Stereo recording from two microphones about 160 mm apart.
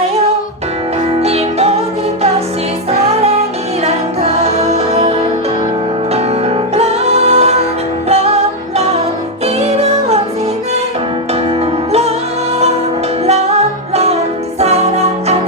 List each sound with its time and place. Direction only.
1.2 s music: 40° right (ahead or behind)
3.8 s music: 40° right (ahead or behind)
6.1 s music: 40° right (ahead or behind)
11.6 s music: 40° right (ahead or behind)
13.9 s music: 40° right (ahead or behind)